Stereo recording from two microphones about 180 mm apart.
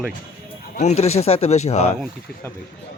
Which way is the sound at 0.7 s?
40° left (ahead or behind).